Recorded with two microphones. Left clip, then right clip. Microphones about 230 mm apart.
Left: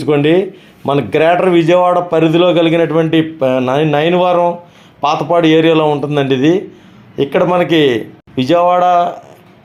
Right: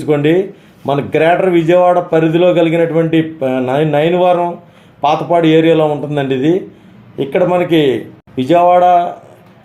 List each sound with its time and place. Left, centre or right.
0.0 s a man's voice: left